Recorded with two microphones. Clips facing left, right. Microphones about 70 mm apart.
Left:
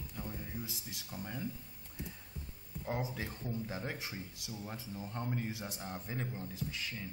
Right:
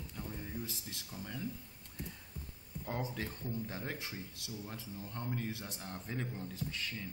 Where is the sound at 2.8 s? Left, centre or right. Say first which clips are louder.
Left 1 dB; centre.